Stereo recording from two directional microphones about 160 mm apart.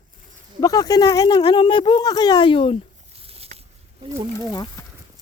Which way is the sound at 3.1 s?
40° right (ahead or behind).